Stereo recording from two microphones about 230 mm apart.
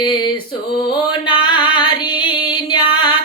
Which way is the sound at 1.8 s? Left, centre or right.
Left.